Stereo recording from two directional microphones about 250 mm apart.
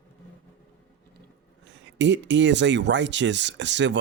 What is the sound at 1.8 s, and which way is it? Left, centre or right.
Speech, right.